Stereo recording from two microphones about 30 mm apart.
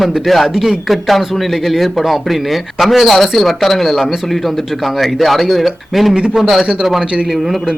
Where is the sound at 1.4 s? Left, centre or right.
Centre.